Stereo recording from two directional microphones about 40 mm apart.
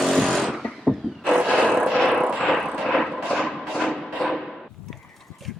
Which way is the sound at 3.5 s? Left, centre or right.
Centre.